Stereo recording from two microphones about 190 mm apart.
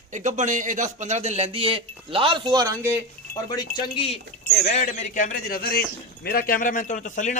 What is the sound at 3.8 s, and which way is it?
Speech, 30° left (ahead or behind).